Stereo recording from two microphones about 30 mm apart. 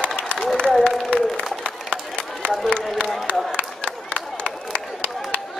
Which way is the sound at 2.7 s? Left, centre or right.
Left.